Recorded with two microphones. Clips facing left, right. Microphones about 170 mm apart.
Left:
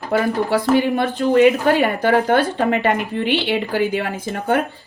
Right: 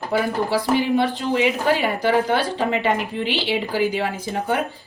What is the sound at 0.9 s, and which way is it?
Speech, 55° left (ahead or behind).